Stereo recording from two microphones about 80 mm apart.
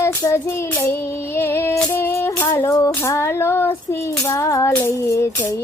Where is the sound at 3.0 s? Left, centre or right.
Left.